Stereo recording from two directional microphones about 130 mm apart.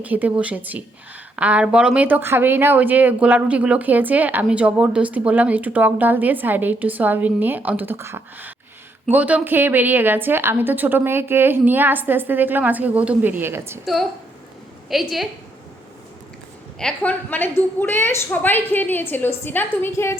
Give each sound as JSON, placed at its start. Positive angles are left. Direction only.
{"t": 0.0, "sound": "speech", "side_deg": -10}
{"t": 13.8, "sound": "a woman's voice", "side_deg": 0}
{"t": 16.8, "sound": "a woman's voice", "side_deg": 10}